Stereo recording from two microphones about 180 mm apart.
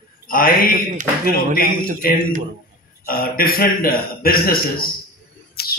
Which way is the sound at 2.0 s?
55° left (ahead or behind).